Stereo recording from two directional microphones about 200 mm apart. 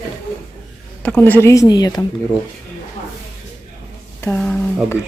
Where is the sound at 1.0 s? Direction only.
5° left (ahead or behind).